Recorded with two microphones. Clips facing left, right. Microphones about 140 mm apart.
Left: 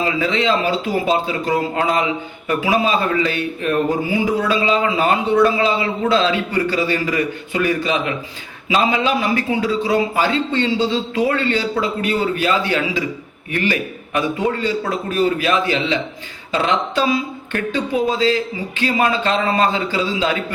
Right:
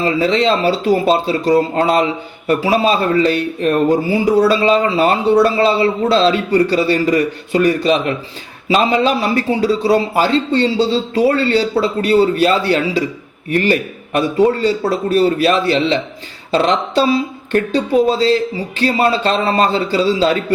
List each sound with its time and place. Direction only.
0.0 s a man's voice: 35° right (ahead or behind)